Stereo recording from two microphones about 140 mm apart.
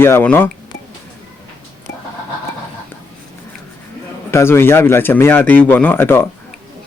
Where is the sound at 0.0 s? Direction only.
15° left (ahead or behind).